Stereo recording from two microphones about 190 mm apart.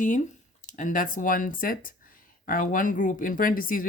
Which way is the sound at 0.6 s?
40° left (ahead or behind).